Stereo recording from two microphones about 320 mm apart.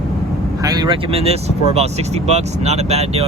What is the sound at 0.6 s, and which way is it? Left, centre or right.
Speech, centre.